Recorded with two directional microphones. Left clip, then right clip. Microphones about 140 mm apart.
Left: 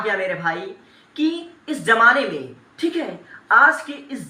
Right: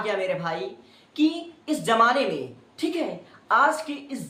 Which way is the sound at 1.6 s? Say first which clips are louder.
Left 6 dB; 35° right (ahead or behind).